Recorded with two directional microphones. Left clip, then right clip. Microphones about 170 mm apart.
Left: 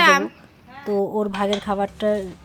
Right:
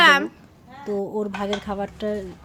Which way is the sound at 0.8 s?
15° left (ahead or behind).